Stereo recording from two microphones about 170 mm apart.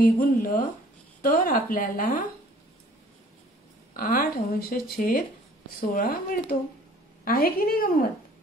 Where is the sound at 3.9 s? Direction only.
60° left (ahead or behind).